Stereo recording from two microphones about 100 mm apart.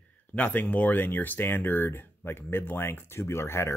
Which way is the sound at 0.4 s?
15° left (ahead or behind).